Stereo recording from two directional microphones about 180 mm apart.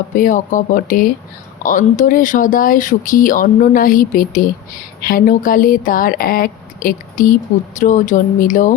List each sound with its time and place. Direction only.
0.2 s speech: 45° left (ahead or behind)